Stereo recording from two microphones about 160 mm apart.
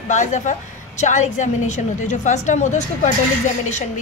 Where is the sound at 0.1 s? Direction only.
50° left (ahead or behind).